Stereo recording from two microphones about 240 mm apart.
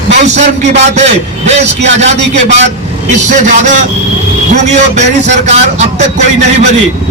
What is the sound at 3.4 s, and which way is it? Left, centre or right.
Speech, right.